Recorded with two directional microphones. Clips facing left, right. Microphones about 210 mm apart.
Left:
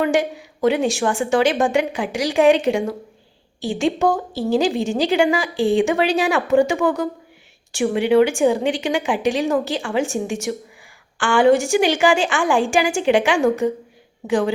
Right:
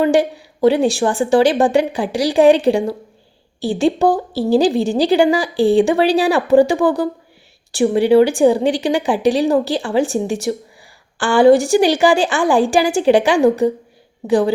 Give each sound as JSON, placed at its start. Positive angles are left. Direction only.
{"t": 0.0, "sound": "a woman's voice", "side_deg": -35}